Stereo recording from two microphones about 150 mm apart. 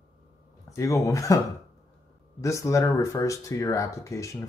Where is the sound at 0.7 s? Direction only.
20° left (ahead or behind).